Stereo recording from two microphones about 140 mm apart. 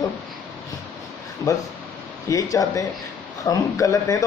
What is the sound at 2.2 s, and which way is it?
A man's voice, 25° left (ahead or behind).